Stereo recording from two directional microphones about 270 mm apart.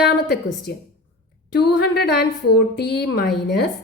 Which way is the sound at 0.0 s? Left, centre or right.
Left.